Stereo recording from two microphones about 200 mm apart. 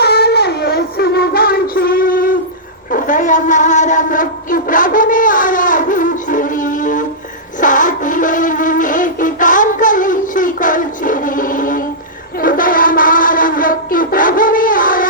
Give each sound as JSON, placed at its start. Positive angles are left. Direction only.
{"t": 0.0, "sound": "child singing", "side_deg": 55}
{"t": 2.9, "sound": "a sound", "side_deg": 40}
{"t": 7.6, "sound": "music", "side_deg": 40}
{"t": 12.4, "sound": "wind instrument", "side_deg": 45}